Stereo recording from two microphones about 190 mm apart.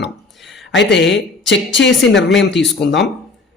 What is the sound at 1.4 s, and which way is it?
A man's voice, 70° left (ahead or behind).